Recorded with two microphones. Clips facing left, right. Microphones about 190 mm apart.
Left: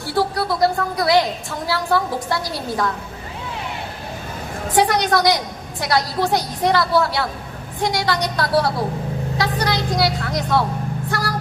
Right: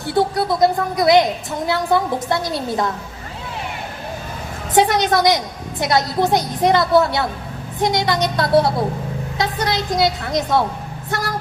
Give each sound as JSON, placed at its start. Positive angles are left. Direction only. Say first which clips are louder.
{"t": 0.0, "sound": "a woman's voice", "louder": "right 3 dB", "side_deg": -20}
{"t": 4.7, "sound": "a woman's voice", "louder": "right 2 dB", "side_deg": -20}